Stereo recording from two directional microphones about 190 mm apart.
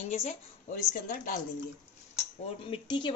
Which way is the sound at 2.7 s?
25° left (ahead or behind).